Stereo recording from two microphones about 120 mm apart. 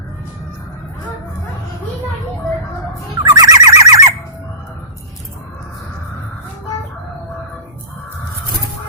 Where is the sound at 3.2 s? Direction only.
30° right (ahead or behind).